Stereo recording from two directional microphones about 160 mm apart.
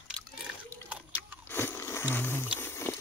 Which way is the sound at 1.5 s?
15° left (ahead or behind).